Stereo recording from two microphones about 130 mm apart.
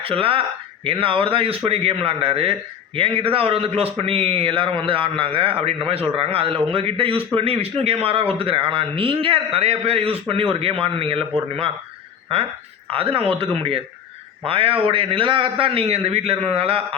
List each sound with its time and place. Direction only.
0.0 s a man's voice: 45° right (ahead or behind)
12.9 s a man's voice: 45° right (ahead or behind)